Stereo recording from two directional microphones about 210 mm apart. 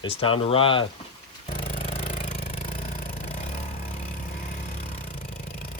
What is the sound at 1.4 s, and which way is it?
Vehicle, 25° left (ahead or behind).